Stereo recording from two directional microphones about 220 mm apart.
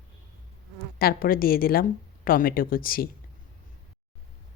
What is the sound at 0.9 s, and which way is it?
Speech, 40° left (ahead or behind).